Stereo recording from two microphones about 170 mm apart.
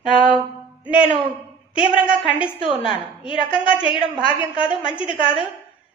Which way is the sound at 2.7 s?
30° left (ahead or behind).